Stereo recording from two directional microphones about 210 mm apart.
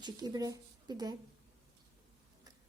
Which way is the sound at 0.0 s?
20° right (ahead or behind).